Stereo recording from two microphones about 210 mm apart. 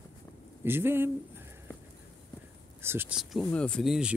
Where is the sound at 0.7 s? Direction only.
10° right (ahead or behind).